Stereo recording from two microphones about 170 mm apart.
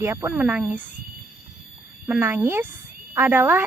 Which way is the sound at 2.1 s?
10° right (ahead or behind).